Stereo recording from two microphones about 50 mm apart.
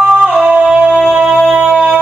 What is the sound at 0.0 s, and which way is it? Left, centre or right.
Music, right.